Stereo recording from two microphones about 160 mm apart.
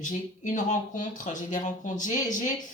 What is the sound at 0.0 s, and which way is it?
A woman's voice, 50° left (ahead or behind).